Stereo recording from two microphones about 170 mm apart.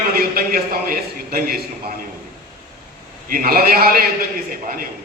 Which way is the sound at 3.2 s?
60° right (ahead or behind).